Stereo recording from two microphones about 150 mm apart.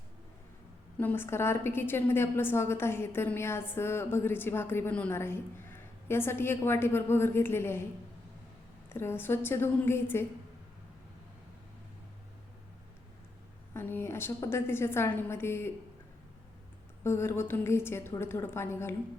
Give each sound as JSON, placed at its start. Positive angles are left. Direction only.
{"t": 0.9, "sound": "a woman's voice", "side_deg": 15}
{"t": 8.9, "sound": "a woman's voice", "side_deg": 15}
{"t": 13.7, "sound": "a woman's voice", "side_deg": 15}
{"t": 17.0, "sound": "a woman's voice", "side_deg": 15}